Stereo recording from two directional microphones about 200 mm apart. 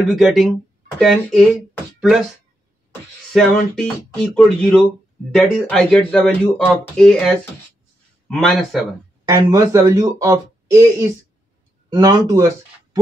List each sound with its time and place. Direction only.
0.1 s speech: centre (ahead or behind)
2.0 s a sound: centre (ahead or behind)
3.3 s speech: 5° left (ahead or behind)
9.3 s speech: 15° right (ahead or behind)